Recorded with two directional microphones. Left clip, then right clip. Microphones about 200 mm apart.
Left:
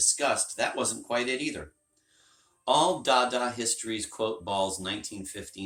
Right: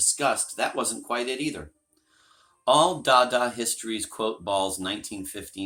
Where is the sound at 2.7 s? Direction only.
50° right (ahead or behind).